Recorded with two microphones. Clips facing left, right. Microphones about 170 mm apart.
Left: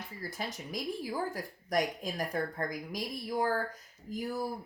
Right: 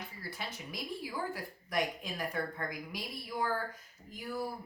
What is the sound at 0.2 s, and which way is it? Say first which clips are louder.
A woman's voice: left 6 dB; 40° left (ahead or behind).